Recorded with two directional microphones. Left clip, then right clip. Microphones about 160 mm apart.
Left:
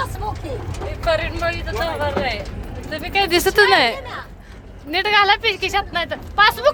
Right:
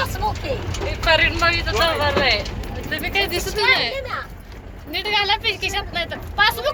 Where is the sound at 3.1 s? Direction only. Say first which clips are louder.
Left 8 dB; 80° left; by 4.0 s 55° left (ahead or behind).